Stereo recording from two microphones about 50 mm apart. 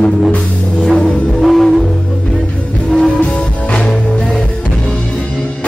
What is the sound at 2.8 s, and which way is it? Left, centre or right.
Music, left.